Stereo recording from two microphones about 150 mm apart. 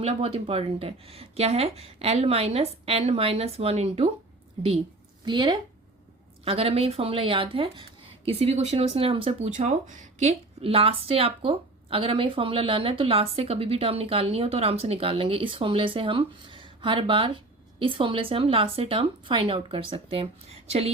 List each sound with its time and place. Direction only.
0.0 s speech: 40° right (ahead or behind)
5.2 s speech: 30° right (ahead or behind)
9.5 s speech: 55° right (ahead or behind)
10.6 s speech: 40° right (ahead or behind)